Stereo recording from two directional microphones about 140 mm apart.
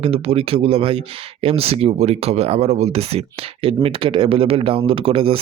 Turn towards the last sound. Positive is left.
turn(degrees=-40)  # may be behind; listen again after turning